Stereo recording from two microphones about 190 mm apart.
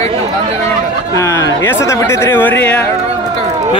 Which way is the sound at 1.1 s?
15° left (ahead or behind).